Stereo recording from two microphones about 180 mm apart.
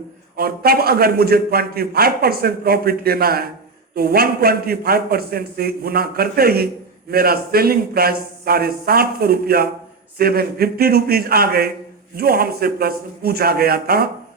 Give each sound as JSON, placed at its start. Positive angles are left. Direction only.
{"t": 0.3, "sound": "a man's voice", "side_deg": -60}